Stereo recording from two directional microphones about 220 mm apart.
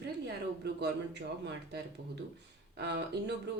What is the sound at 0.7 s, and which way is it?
Speech, 50° right (ahead or behind).